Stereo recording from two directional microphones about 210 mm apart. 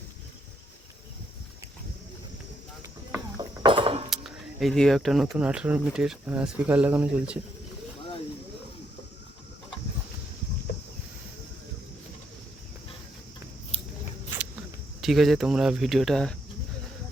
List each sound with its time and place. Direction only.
3.1 s a sound: 20° right (ahead or behind)
4.1 s speech: centre (ahead or behind)
15.0 s speech: centre (ahead or behind)